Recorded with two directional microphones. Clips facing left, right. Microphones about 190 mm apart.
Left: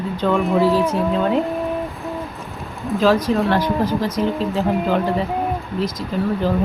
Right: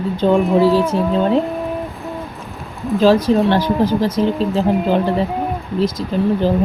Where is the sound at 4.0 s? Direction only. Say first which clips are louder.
Right 4 dB; 30° right (ahead or behind).